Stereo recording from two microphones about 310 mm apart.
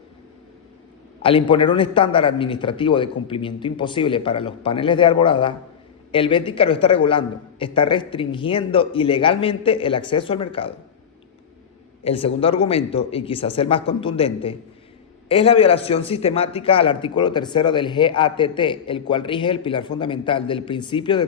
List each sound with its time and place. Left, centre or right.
1.2 s a man's voice: centre
12.0 s a man's voice: centre